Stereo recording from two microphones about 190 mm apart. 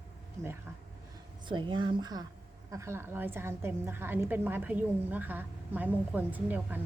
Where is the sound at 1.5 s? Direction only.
25° right (ahead or behind).